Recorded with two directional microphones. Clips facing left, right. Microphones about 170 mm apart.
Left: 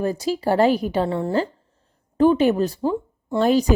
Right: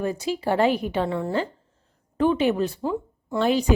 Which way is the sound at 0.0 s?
35° left (ahead or behind).